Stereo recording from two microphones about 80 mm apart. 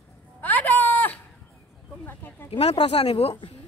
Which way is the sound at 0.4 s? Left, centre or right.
Left.